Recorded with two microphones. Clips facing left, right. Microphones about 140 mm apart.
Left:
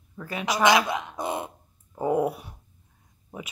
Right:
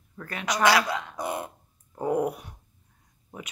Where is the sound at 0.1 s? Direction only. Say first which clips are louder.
Left 2 dB; 5° left (ahead or behind).